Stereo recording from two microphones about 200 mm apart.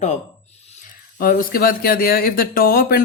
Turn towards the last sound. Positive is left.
turn(degrees=45)  # may be behind; listen again after turning